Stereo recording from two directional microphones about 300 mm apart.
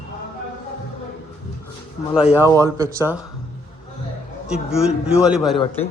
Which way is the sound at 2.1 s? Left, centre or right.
Centre.